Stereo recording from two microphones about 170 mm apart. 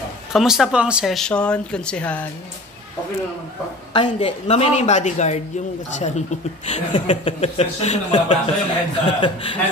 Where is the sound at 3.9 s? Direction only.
30° left (ahead or behind).